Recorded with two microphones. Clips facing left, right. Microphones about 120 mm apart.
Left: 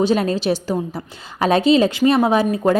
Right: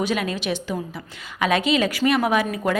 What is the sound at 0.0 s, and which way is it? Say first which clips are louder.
A woman's voice: left 7 dB; 35° left (ahead or behind).